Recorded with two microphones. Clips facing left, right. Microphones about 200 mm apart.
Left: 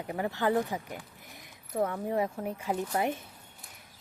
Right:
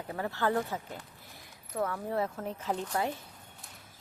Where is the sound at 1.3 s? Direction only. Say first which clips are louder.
Left 4 dB; 20° left (ahead or behind).